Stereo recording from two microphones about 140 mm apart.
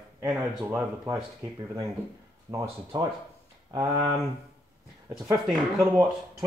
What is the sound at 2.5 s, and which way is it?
Speech, 30° right (ahead or behind).